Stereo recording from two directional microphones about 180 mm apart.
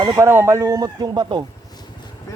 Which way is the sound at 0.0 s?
25° right (ahead or behind).